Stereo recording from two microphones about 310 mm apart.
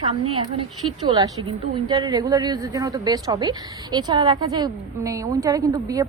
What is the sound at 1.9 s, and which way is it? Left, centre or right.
A woman's voice, centre.